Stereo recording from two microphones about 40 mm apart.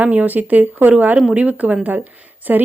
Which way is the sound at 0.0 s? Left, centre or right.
Right.